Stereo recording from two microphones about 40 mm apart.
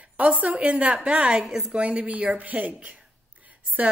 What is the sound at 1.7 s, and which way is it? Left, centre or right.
A woman's voice, right.